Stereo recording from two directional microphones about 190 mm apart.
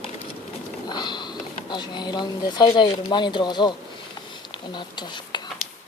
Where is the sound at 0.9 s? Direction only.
20° left (ahead or behind).